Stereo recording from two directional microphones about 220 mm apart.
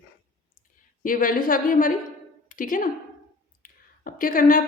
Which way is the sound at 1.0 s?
40° left (ahead or behind).